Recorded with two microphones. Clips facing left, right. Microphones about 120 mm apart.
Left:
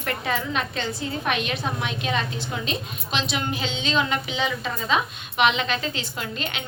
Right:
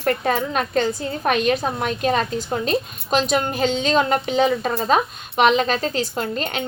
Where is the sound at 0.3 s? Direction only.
45° right (ahead or behind).